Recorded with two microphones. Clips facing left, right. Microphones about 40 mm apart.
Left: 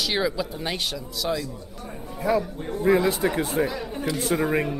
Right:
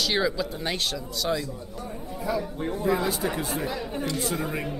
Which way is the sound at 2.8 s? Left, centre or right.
Left.